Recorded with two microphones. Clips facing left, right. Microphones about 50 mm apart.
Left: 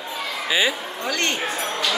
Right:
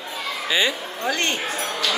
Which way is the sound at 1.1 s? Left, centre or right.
Right.